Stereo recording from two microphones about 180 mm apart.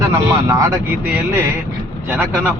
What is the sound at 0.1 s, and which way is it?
Speech, 15° right (ahead or behind).